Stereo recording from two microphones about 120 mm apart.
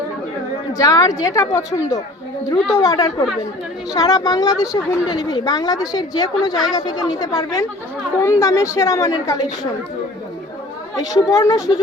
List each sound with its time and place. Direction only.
0.7 s a woman's voice: 30° left (ahead or behind)
10.9 s a woman's voice: 30° left (ahead or behind)